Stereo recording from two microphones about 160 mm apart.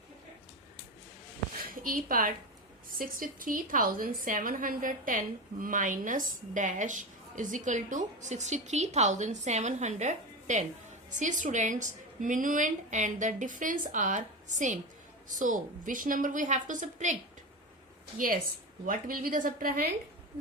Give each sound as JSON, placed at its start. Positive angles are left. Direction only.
{"t": 1.8, "sound": "a woman's voice", "side_deg": -60}
{"t": 18.9, "sound": "a woman's voice", "side_deg": -65}